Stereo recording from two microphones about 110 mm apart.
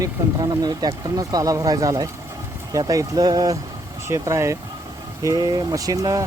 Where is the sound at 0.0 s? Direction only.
35° right (ahead or behind).